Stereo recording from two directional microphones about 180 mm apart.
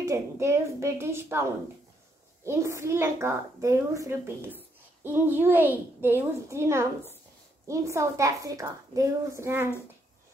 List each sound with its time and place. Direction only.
0.0 s a woman's voice: 15° right (ahead or behind)